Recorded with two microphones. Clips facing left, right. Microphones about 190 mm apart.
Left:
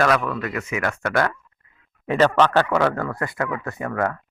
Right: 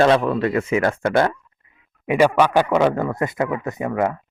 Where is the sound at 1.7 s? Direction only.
15° right (ahead or behind).